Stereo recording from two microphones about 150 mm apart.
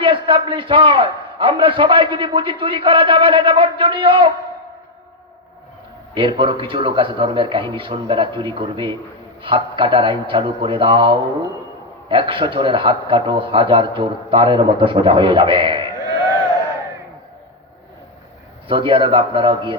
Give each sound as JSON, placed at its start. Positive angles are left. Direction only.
{"t": 0.0, "sound": "a man's voice", "side_deg": -35}
{"t": 6.1, "sound": "a man's voice", "side_deg": -35}
{"t": 15.8, "sound": "a sound", "side_deg": 25}
{"t": 18.7, "sound": "a man's voice", "side_deg": -35}